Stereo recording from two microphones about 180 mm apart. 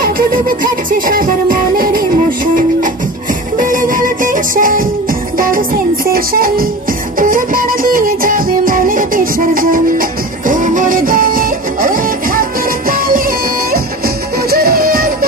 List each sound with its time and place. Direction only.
0.9 s music: 50° right (ahead or behind)
6.1 s music: 55° right (ahead or behind)
14.5 s music: 55° right (ahead or behind)